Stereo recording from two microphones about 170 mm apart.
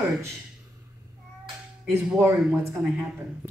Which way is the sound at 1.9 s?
15° right (ahead or behind).